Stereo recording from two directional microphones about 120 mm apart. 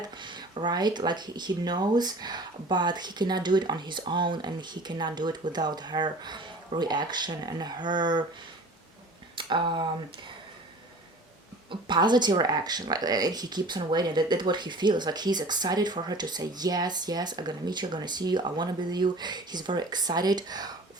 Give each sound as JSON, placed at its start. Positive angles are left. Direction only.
{"t": 0.0, "sound": "speech", "side_deg": -40}
{"t": 9.4, "sound": "speech", "side_deg": -40}
{"t": 11.7, "sound": "speech", "side_deg": -40}